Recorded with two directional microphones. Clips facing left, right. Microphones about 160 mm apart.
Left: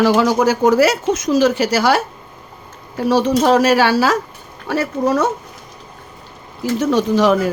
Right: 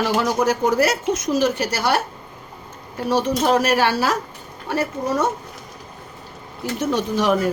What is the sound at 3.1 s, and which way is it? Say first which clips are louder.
Speech: left 5 dB; 90° left.